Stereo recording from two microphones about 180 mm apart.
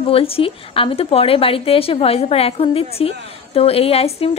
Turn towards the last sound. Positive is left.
turn(degrees=35)  # may be behind; listen again after turning